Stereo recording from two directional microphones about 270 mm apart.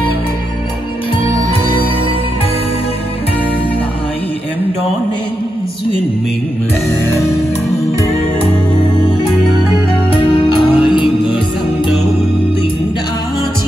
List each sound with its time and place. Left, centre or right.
10.4 s music: centre